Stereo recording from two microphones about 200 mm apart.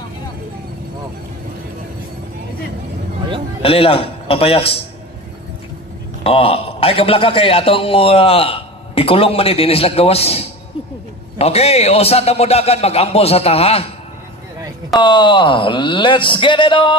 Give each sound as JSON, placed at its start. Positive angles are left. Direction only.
{"t": 3.6, "sound": "a man's voice", "side_deg": 30}
{"t": 6.2, "sound": "a man's voice", "side_deg": 30}
{"t": 15.0, "sound": "a man's voice", "side_deg": 25}